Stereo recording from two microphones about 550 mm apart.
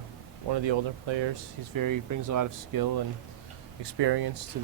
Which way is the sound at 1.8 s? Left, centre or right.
Right.